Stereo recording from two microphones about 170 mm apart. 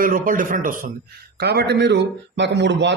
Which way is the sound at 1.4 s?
70° right (ahead or behind).